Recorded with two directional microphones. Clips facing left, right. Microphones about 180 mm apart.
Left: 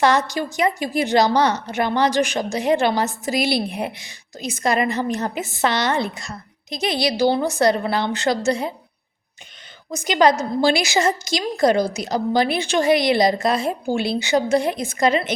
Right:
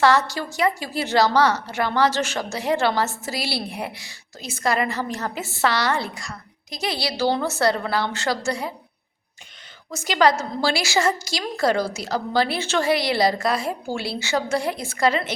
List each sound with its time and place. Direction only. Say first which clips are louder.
0.0 s a woman's voice: left 1 dB; 20° left (ahead or behind)
9.9 s a woman's voice: left 2 dB; 20° left (ahead or behind)